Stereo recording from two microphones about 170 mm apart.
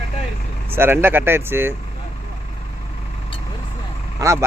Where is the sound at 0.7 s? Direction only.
15° right (ahead or behind).